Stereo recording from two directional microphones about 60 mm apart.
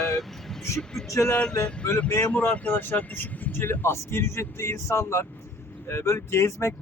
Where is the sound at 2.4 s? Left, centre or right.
Left.